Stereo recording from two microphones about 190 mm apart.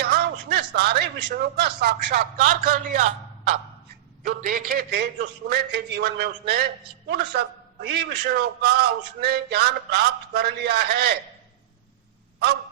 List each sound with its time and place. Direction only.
0.0 s a man's voice: 55° right (ahead or behind)
2.4 s speech: 45° right (ahead or behind)
4.2 s speech: 45° right (ahead or behind)